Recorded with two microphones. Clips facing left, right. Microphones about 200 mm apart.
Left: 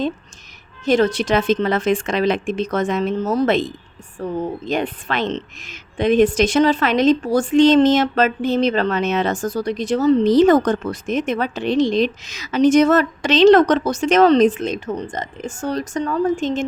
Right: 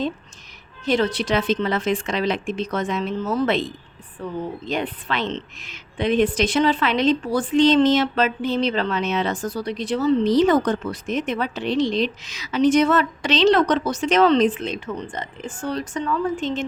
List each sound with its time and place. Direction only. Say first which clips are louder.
0.9 s speech: left 4 dB; 45° left (ahead or behind)